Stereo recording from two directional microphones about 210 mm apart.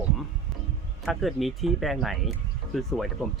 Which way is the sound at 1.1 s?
Centre (ahead or behind).